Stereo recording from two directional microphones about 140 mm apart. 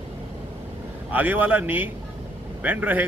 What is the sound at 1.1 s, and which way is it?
Speech, 10° right (ahead or behind).